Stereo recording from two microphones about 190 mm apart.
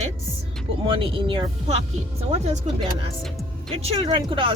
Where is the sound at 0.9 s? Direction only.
25° right (ahead or behind).